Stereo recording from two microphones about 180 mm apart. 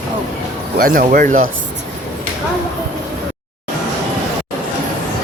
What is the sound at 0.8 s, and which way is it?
Speech, 50° right (ahead or behind).